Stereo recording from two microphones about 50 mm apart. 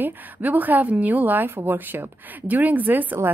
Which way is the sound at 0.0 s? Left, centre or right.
Right.